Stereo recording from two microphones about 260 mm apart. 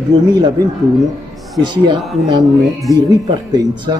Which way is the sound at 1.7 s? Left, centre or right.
Centre.